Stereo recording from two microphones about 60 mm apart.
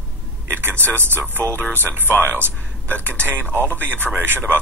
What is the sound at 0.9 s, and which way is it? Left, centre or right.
Speech, right.